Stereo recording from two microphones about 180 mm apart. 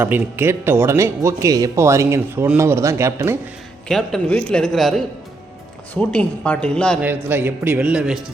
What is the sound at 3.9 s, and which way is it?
A man's voice, 5° left (ahead or behind).